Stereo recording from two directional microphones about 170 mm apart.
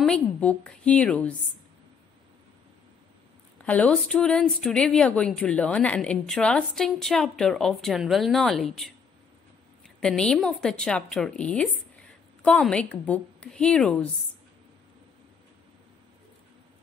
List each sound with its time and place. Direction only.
0.0 s a woman's voice: 5° left (ahead or behind)
3.6 s a woman's voice: 5° left (ahead or behind)